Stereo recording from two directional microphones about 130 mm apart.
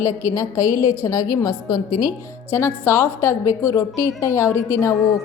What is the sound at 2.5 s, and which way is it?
A woman's voice, 20° left (ahead or behind).